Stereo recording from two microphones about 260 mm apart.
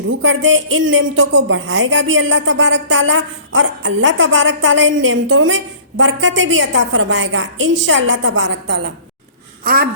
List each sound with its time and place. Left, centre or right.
0.1 s a woman's voice: right
9.6 s gasp: right